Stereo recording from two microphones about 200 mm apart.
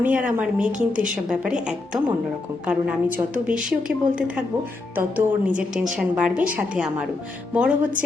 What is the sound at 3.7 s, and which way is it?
A woman's voice, 5° right (ahead or behind).